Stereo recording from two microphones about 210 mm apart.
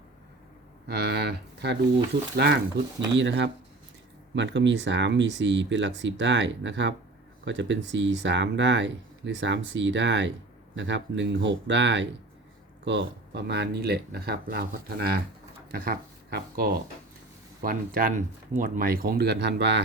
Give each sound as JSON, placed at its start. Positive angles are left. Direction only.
{"t": 0.9, "sound": "speech", "side_deg": -50}